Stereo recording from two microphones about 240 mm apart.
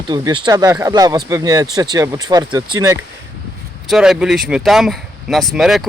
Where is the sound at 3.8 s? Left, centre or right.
Centre.